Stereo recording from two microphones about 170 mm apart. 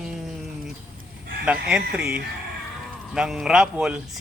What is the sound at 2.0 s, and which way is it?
Speech, 70° right (ahead or behind).